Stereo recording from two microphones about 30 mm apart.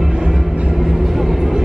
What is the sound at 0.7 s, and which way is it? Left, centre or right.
Vehicle, centre.